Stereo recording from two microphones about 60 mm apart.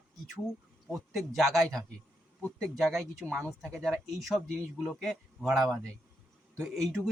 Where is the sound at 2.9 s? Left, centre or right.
Centre.